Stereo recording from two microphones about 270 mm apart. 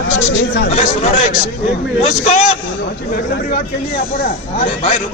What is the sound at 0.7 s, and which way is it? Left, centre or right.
A man's voice, left.